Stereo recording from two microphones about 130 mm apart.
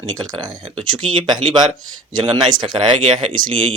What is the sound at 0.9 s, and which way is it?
Speech, 25° right (ahead or behind).